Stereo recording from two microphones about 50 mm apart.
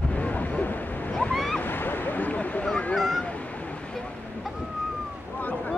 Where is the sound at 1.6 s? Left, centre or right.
Left.